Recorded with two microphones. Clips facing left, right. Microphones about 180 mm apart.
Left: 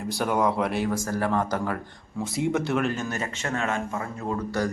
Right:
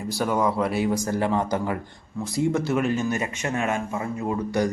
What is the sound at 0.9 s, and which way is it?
Speech, 20° right (ahead or behind).